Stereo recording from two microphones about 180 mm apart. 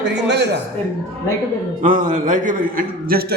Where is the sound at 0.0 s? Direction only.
75° right (ahead or behind).